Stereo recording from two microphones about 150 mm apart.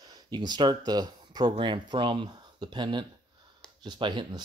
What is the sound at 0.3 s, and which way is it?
Speech, 30° right (ahead or behind).